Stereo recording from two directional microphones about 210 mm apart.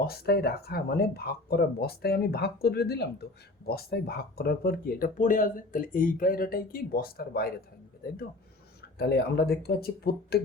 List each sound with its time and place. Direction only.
0.0 s speech: 50° left (ahead or behind)
9.0 s speech: 50° left (ahead or behind)